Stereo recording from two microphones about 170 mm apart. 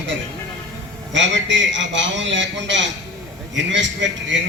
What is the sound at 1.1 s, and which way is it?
Speech, 90° right.